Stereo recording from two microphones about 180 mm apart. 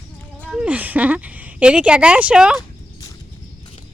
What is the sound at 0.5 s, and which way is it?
A woman's voice, 5° right (ahead or behind).